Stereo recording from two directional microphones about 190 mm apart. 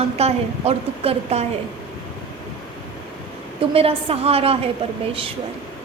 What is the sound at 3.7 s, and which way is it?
A woman's voice, 30° right (ahead or behind).